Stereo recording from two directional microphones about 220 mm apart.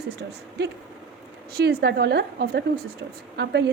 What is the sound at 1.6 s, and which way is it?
A woman's voice, 45° right (ahead or behind).